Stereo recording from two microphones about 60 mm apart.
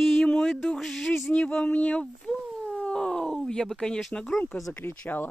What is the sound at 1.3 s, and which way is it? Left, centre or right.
Speech, centre.